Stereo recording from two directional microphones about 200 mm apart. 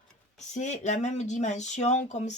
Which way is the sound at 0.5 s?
35° left (ahead or behind).